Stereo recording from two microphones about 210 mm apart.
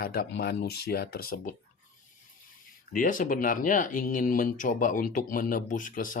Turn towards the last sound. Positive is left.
turn(degrees=40)  # may be behind; listen again after turning